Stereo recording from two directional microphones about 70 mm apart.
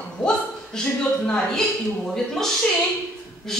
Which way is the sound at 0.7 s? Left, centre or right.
Centre.